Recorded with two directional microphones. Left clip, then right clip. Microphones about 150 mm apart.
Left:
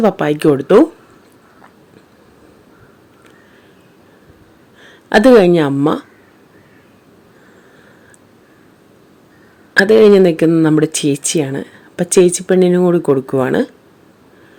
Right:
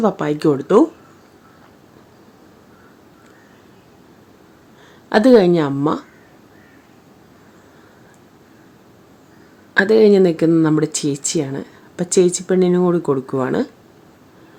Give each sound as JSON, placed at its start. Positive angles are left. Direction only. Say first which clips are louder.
{"t": 0.0, "sound": "speech", "louder": "left 4 dB", "side_deg": 15}
{"t": 4.8, "sound": "speech", "louder": "left 4 dB", "side_deg": 15}
{"t": 9.7, "sound": "speech", "louder": "left 4 dB", "side_deg": 15}